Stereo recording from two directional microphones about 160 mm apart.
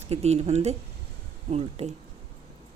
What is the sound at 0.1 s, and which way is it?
Speech, 40° right (ahead or behind).